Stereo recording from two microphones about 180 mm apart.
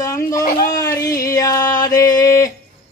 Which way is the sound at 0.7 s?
20° left (ahead or behind).